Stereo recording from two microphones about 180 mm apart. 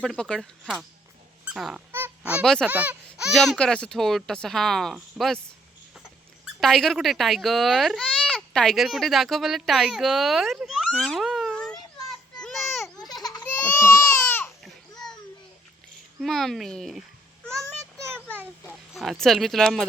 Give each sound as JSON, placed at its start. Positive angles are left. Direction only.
{"t": 0.0, "sound": "speech", "side_deg": 5}
{"t": 1.5, "sound": "dog", "side_deg": -5}
{"t": 1.9, "sound": "honk", "side_deg": -10}
{"t": 2.6, "sound": "speech", "side_deg": -10}
{"t": 6.4, "sound": "speech", "side_deg": 0}
{"t": 12.0, "sound": "children playing", "side_deg": 0}
{"t": 13.2, "sound": "a sound", "side_deg": 20}
{"t": 13.5, "sound": "baby cry", "side_deg": 10}
{"t": 16.2, "sound": "speech", "side_deg": 0}
{"t": 18.9, "sound": "speech", "side_deg": 0}